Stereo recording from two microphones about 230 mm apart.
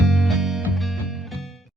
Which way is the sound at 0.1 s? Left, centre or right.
Centre.